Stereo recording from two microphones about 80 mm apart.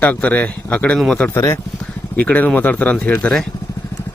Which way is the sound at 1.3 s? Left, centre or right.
Left.